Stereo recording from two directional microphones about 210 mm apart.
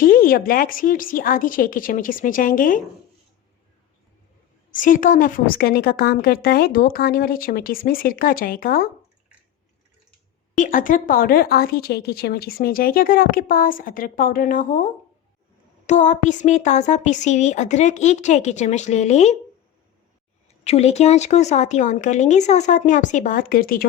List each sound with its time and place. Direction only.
0.0 s speech: 45° left (ahead or behind)
4.7 s speech: 40° left (ahead or behind)
10.6 s speech: 40° left (ahead or behind)
20.7 s speech: 30° left (ahead or behind)